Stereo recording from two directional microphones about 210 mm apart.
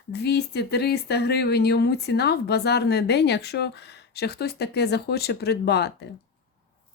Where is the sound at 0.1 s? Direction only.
50° left (ahead or behind).